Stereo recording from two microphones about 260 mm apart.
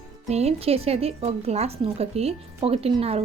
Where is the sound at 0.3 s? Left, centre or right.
Right.